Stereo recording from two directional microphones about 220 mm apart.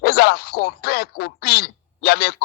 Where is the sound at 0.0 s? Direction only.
45° left (ahead or behind).